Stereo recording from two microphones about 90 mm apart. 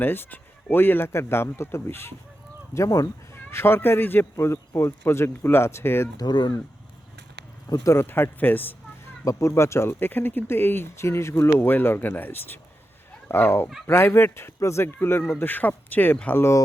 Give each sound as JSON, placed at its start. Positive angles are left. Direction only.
{"t": 0.0, "sound": "speech", "side_deg": 20}
{"t": 2.7, "sound": "speech", "side_deg": 40}
{"t": 3.3, "sound": "speech", "side_deg": 25}
{"t": 6.1, "sound": "speech", "side_deg": 55}
{"t": 7.7, "sound": "speech", "side_deg": 30}
{"t": 9.2, "sound": "speech", "side_deg": 30}
{"t": 16.4, "sound": "speech", "side_deg": 35}